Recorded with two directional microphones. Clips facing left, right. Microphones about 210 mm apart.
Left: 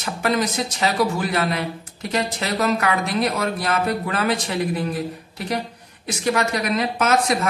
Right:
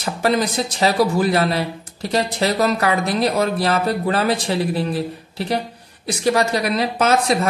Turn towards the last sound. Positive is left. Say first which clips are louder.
# right 2 dB
turn(degrees=-30)  # may be behind; listen again after turning